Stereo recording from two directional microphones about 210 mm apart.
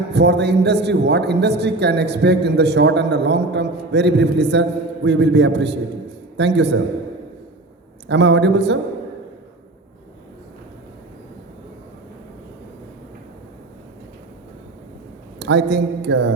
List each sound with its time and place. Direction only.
0.1 s a man's voice: 55° right (ahead or behind)
8.0 s speech: 55° right (ahead or behind)
15.4 s a man's voice: 55° right (ahead or behind)